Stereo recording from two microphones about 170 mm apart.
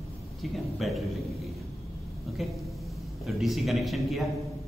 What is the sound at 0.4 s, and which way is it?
Speech, centre (ahead or behind).